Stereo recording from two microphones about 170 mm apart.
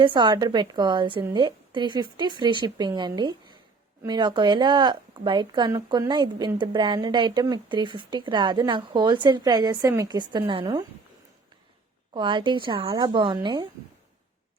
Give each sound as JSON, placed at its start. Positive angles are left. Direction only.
{"t": 0.0, "sound": "speech", "side_deg": -25}
{"t": 12.1, "sound": "speech", "side_deg": -30}